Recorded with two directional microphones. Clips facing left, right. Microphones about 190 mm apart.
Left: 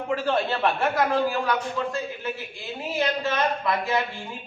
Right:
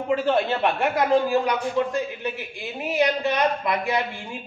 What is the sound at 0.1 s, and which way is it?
A man's voice, 15° right (ahead or behind).